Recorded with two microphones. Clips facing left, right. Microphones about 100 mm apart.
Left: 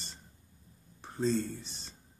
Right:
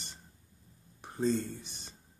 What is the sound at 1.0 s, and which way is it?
Speech, 15° right (ahead or behind).